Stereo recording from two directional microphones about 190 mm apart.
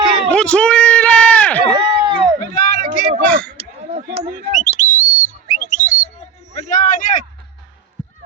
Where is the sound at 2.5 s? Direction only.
40° left (ahead or behind).